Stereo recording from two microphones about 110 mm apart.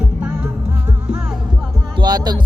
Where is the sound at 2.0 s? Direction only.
40° right (ahead or behind).